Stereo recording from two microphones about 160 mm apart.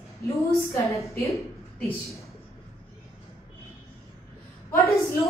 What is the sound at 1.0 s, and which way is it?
Speech, 20° left (ahead or behind).